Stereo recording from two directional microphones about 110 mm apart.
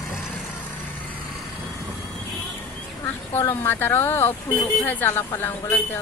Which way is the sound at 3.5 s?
20° left (ahead or behind).